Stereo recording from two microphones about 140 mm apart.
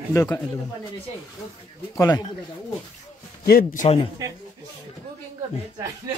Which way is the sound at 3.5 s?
90° left.